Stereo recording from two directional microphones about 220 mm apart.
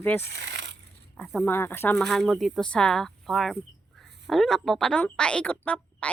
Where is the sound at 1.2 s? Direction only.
5° left (ahead or behind).